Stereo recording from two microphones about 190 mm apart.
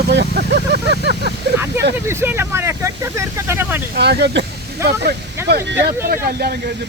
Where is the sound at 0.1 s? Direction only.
65° right (ahead or behind).